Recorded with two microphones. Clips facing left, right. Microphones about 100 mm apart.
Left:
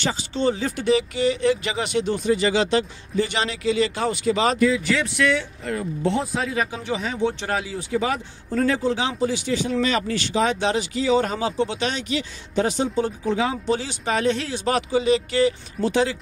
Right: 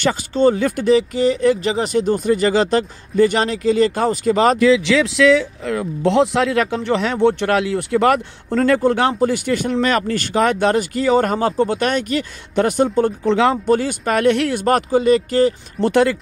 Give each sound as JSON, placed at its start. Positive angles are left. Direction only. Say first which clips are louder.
{"t": 0.0, "sound": "speech", "louder": "right 7 dB", "side_deg": -50}
{"t": 4.6, "sound": "speech", "louder": "right 6 dB", "side_deg": -90}
{"t": 13.7, "sound": "speech", "louder": "right 7 dB", "side_deg": -50}